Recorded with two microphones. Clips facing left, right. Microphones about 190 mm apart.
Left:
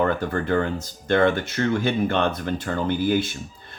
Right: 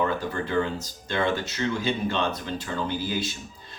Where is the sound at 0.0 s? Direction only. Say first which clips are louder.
Left 4 dB; 50° left (ahead or behind).